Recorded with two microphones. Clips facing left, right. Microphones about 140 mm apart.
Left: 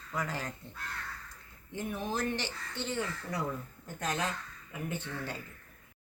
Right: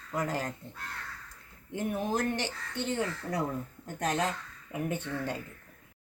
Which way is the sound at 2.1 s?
50° right (ahead or behind).